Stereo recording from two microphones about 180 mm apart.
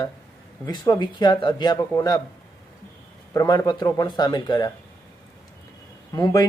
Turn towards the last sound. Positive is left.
turn(degrees=20)  # may be behind; listen again after turning